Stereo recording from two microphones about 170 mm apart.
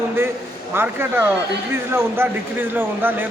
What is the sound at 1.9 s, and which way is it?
A man's voice, 15° right (ahead or behind).